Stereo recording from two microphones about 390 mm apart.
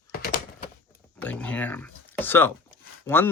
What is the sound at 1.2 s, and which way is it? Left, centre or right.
Speech, centre.